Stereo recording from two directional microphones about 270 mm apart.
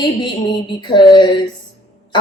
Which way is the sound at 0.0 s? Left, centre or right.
Centre.